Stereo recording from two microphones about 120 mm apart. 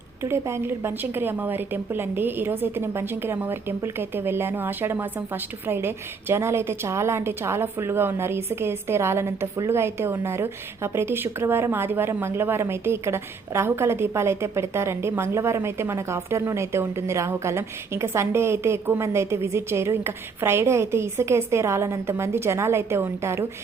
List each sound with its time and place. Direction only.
0.2 s a woman's voice: 20° right (ahead or behind)